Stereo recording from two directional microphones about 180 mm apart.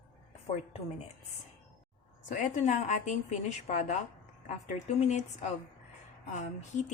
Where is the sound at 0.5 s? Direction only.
35° left (ahead or behind).